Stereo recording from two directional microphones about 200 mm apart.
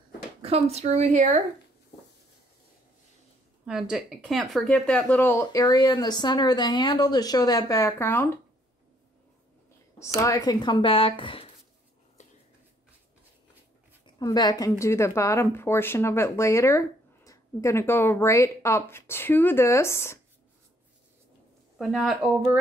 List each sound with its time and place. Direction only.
0.4 s speech: 30° right (ahead or behind)
3.6 s speech: 5° right (ahead or behind)
9.9 s speech: 15° left (ahead or behind)
12.2 s a sound: 35° left (ahead or behind)
14.0 s speech: 20° left (ahead or behind)
21.7 s speech: centre (ahead or behind)